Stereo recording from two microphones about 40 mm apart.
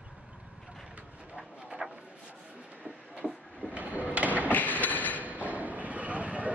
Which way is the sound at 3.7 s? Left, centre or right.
Right.